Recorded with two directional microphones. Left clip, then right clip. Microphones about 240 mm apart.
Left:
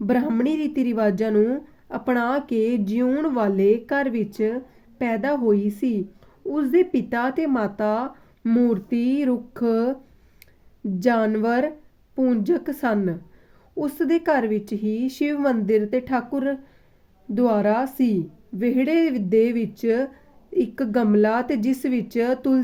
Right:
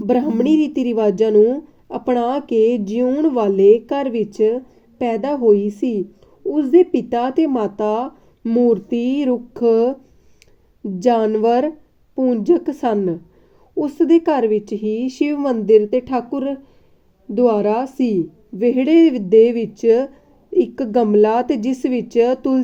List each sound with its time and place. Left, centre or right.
0.1 s a woman's voice: centre
2.7 s a woman's voice: left
3.0 s a woman's voice: centre
11.0 s a woman's voice: centre